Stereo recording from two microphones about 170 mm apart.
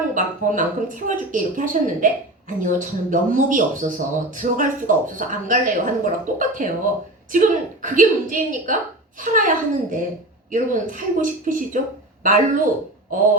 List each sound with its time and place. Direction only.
0.1 s speech: 50° right (ahead or behind)